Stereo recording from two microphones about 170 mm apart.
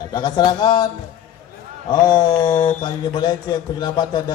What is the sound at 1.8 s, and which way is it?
Speech, 25° left (ahead or behind).